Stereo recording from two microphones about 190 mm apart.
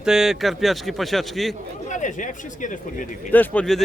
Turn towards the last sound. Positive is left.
turn(degrees=5)  # may be behind; listen again after turning